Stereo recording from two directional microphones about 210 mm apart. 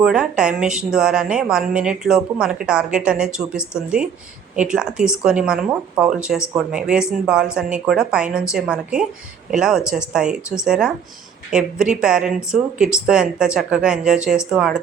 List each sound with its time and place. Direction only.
0.0 s a woman's voice: 5° right (ahead or behind)